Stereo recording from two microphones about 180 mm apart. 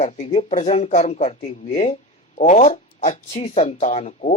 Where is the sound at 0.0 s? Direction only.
35° left (ahead or behind).